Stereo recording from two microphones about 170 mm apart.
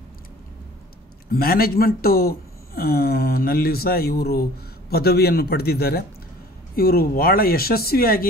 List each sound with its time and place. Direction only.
1.3 s a man's voice: 60° left (ahead or behind)